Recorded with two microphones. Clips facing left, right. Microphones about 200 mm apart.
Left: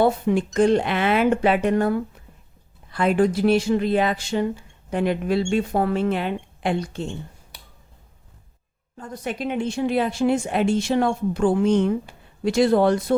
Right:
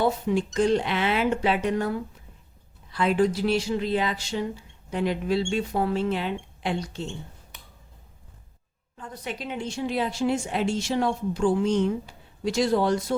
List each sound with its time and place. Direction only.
0.0 s speech: 55° left (ahead or behind)
9.0 s speech: 45° left (ahead or behind)